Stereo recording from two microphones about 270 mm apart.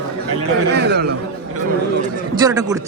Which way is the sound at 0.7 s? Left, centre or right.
Right.